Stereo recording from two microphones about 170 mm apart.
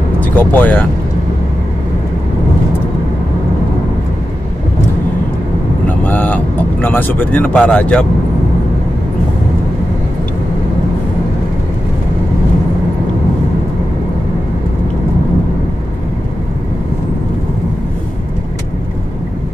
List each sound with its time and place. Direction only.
0.4 s speech: 10° left (ahead or behind)
5.9 s vehicle: 10° left (ahead or behind)